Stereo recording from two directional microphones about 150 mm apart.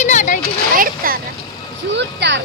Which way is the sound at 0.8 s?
75° right (ahead or behind).